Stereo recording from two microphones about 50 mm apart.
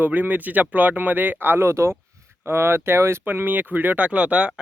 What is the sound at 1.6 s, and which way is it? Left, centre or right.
Speech, right.